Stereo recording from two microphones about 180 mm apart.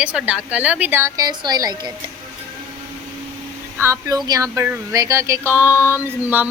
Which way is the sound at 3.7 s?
15° right (ahead or behind).